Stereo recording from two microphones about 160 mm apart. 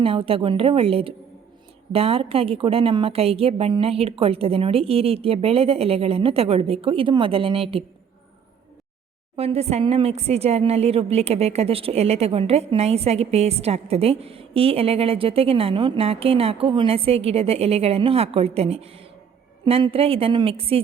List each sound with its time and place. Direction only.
0.0 s speech: 35° right (ahead or behind)
9.3 s speech: 40° right (ahead or behind)